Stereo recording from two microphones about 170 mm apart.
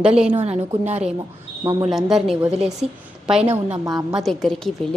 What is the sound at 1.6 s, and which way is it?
Speech, 25° right (ahead or behind).